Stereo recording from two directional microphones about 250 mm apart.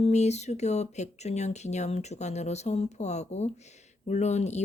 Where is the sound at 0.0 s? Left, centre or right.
Left.